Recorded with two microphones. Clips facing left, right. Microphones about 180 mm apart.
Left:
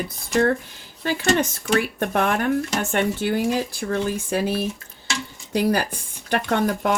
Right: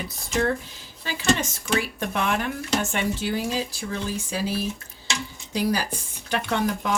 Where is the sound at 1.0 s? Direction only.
55° left (ahead or behind).